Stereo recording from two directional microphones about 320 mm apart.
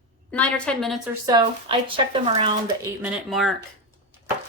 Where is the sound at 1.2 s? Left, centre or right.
Centre.